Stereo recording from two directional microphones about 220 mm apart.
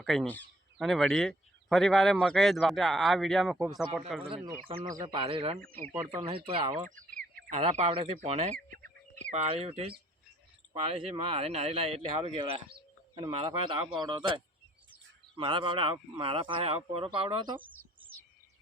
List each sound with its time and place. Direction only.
0.0 s speech: centre (ahead or behind)
4.7 s speech: 30° right (ahead or behind)